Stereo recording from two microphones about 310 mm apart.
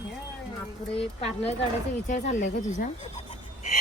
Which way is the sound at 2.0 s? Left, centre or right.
Left.